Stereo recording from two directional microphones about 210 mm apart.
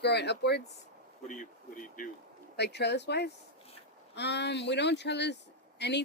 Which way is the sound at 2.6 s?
55° left (ahead or behind).